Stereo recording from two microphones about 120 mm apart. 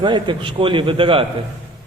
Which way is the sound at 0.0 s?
40° right (ahead or behind).